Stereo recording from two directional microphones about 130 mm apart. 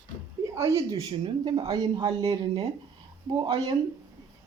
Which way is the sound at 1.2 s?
40° right (ahead or behind).